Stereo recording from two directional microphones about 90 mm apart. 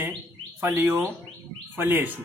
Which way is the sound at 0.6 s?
25° right (ahead or behind).